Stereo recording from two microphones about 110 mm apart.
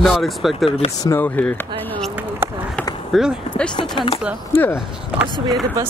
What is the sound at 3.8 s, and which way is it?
Speech, 50° left (ahead or behind).